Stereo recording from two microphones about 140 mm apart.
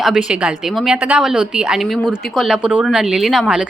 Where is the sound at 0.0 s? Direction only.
5° right (ahead or behind).